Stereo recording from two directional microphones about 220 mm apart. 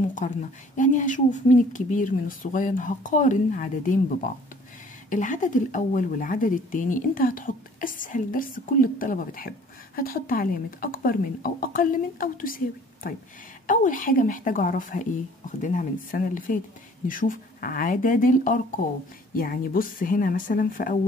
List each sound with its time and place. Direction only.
0.1 s a woman's voice: 35° left (ahead or behind)